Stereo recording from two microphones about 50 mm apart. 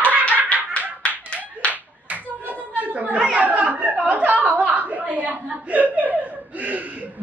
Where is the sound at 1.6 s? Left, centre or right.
Left.